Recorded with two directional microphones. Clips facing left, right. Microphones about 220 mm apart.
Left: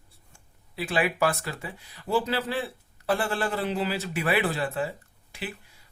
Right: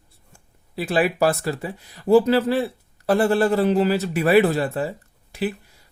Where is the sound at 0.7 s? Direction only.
40° right (ahead or behind).